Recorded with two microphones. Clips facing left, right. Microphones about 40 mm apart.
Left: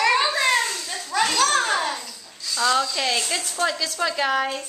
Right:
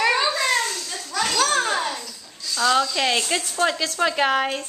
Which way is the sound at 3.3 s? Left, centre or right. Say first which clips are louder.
Right 2 dB; right.